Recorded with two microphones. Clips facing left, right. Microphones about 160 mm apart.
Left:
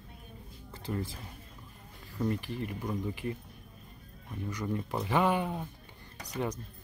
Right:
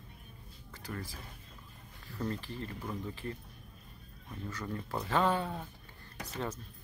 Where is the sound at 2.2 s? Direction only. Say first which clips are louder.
Left 5 dB; 15° left (ahead or behind).